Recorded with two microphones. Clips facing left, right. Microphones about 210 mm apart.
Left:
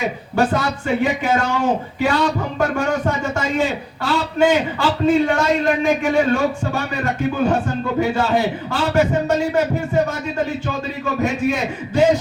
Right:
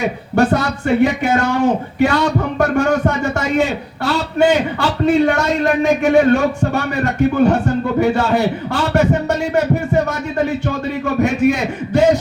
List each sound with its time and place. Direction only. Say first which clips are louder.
0.0 s a man's voice: right 4 dB; 70° right (ahead or behind)